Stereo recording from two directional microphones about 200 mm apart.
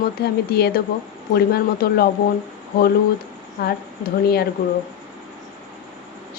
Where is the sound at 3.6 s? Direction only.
50° left (ahead or behind).